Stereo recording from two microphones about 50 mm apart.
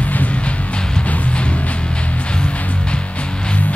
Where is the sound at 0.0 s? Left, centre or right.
Left.